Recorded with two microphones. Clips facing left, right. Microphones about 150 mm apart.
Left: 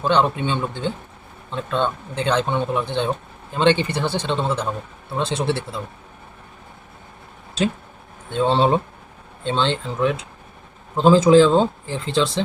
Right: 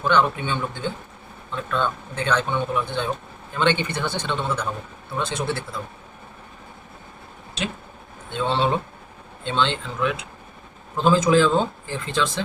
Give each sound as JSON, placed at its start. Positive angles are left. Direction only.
{"t": 0.0, "sound": "speech", "side_deg": 30}
{"t": 8.3, "sound": "speech", "side_deg": 40}